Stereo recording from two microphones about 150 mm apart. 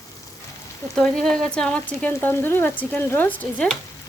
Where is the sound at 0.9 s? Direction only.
5° left (ahead or behind).